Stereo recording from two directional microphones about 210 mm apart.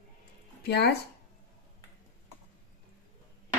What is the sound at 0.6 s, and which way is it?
Speech, 50° left (ahead or behind).